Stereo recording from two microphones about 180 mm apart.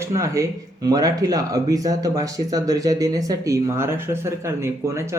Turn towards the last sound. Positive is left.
turn(degrees=-15)  # may be behind; listen again after turning